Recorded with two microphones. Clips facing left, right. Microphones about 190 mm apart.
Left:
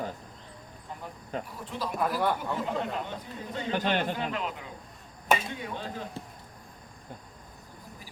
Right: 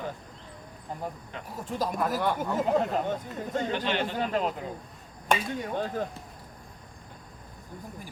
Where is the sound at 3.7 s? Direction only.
45° left (ahead or behind).